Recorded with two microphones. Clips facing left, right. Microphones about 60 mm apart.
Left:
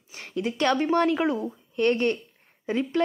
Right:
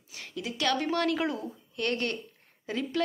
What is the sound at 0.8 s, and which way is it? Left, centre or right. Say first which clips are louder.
Speech: left 6 dB; left.